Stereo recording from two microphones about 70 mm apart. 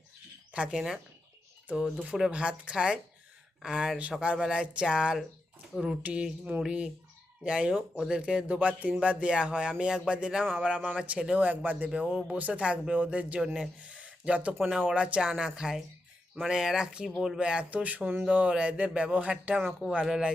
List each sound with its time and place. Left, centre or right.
0.5 s speech: centre
3.6 s speech: centre
4.2 s speech: centre
11.9 s speech: centre
13.4 s speech: centre
13.9 s a sound: centre
14.9 s speech: centre